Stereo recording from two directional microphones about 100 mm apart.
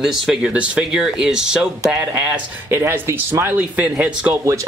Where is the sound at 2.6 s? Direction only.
25° right (ahead or behind).